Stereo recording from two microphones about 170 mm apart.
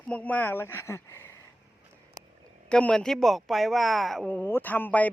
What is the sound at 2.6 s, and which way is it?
Speech, 5° left (ahead or behind).